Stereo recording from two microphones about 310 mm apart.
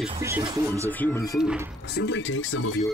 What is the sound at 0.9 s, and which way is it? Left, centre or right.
Speech, centre.